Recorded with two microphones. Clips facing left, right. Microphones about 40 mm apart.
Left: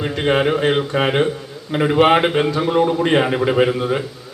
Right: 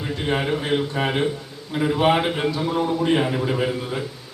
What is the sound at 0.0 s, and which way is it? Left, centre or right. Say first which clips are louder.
A man's voice: left 7 dB; left.